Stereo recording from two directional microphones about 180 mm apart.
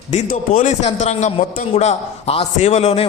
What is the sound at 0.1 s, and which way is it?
A man's voice, 40° left (ahead or behind).